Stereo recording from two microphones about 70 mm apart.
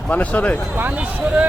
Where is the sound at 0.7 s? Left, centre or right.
Right.